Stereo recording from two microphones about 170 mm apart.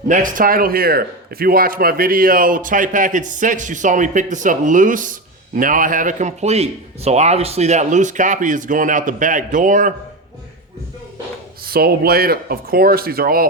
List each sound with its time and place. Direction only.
0.1 s speech: 50° right (ahead or behind)
11.6 s speech: 65° right (ahead or behind)